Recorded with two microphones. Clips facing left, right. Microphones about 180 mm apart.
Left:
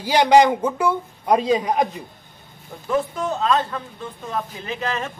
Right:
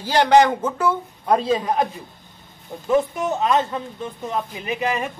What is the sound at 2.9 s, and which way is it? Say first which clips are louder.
Speech: right 3 dB; 20° right (ahead or behind).